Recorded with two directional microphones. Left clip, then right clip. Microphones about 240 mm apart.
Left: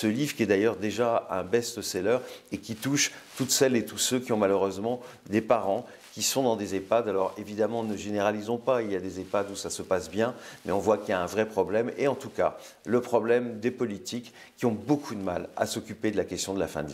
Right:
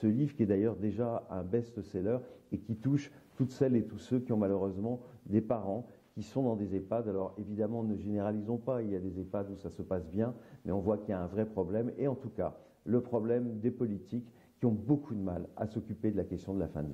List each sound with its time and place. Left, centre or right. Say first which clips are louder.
0.0 s speech: left 5 dB; centre